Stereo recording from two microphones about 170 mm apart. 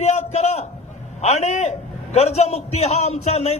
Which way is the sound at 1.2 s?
40° left (ahead or behind).